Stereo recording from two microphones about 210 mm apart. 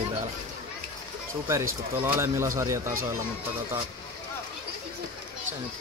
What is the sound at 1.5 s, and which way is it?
A man's voice, 10° right (ahead or behind).